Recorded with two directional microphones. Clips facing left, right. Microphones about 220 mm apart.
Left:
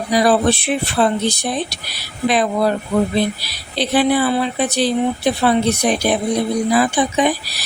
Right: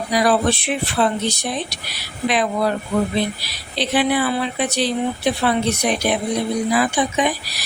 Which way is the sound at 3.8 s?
35° left (ahead or behind).